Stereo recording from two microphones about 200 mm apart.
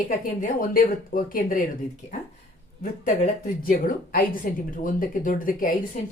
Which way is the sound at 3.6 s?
45° left (ahead or behind).